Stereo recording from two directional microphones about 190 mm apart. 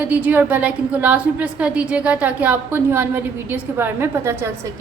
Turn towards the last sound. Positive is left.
turn(degrees=-10)  # may be behind; listen again after turning